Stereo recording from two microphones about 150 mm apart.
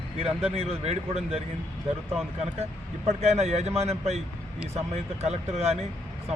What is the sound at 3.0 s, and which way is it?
Speech, 45° right (ahead or behind).